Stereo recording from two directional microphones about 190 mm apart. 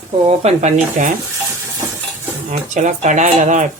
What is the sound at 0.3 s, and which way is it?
Speech, 35° right (ahead or behind).